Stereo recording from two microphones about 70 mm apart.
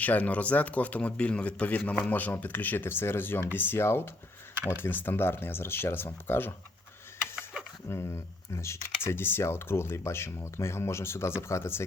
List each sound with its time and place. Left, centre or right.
0.0 s speech: left
7.9 s speech: left